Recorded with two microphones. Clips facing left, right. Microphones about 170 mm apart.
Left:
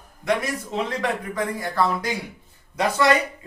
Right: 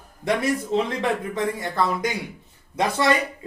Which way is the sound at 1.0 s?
25° right (ahead or behind).